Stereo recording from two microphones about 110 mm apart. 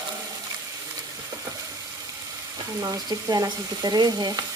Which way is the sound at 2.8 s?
35° right (ahead or behind).